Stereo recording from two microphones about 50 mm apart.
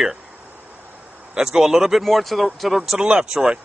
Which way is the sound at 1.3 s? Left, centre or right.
Centre.